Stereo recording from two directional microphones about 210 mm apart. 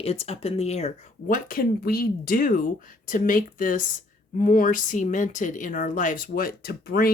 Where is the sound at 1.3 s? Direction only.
45° left (ahead or behind).